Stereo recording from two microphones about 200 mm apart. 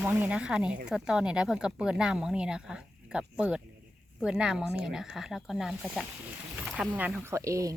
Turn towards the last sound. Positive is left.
turn(degrees=-15)  # may be behind; listen again after turning